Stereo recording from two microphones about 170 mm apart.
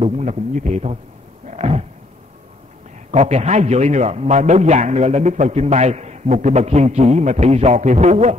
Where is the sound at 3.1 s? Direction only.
40° right (ahead or behind).